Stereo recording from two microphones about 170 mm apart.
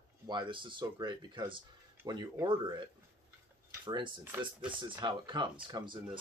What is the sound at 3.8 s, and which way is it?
Speech, 25° right (ahead or behind).